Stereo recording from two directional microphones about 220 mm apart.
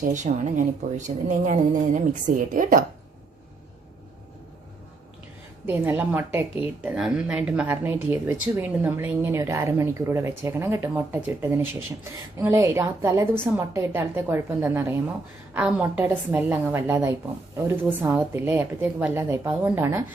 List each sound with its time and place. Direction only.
0.1 s a woman's voice: 35° right (ahead or behind)
5.6 s a woman's voice: 10° right (ahead or behind)